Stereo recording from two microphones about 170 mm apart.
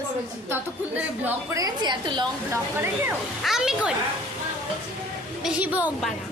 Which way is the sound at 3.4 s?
Centre (ahead or behind).